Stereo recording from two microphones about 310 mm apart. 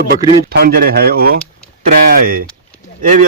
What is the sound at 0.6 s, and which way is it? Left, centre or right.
Speech, right.